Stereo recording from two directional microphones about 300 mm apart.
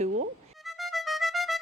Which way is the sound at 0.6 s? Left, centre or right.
Centre.